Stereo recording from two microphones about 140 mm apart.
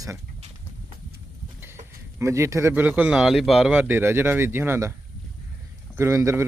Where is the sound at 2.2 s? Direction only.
20° right (ahead or behind).